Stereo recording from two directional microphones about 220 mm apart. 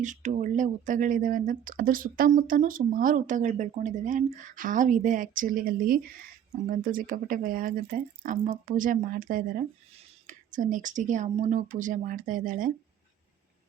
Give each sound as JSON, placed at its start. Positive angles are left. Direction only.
{"t": 0.0, "sound": "speech", "side_deg": -35}